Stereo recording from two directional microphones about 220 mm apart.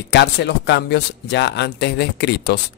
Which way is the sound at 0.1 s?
50° left (ahead or behind).